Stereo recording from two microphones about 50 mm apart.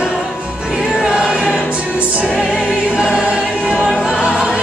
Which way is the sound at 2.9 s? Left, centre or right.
Centre.